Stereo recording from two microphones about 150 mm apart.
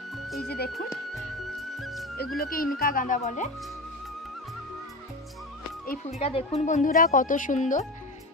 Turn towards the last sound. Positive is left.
turn(degrees=55)  # may be behind; listen again after turning